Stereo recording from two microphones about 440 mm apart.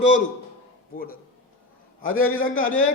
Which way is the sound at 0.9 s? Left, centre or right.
Centre.